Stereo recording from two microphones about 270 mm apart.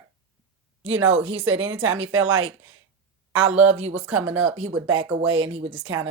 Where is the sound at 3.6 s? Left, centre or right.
Right.